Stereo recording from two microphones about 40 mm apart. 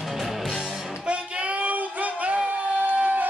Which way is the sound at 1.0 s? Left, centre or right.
Right.